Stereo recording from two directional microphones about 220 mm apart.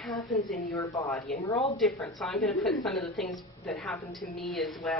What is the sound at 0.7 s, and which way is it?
Speech, 15° left (ahead or behind).